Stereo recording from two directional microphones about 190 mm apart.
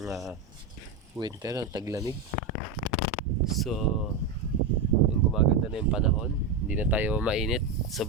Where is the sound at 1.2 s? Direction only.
20° right (ahead or behind).